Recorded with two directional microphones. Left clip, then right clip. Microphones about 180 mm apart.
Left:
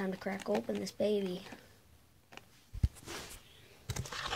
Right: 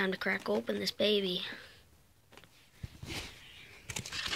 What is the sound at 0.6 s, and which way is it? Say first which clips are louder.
Speech: right 3 dB; 15° right (ahead or behind).